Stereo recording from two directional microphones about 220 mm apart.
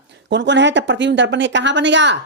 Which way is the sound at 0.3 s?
55° right (ahead or behind).